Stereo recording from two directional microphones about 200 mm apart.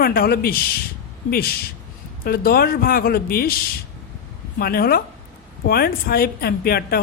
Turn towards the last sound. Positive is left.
turn(degrees=50)  # may be behind; listen again after turning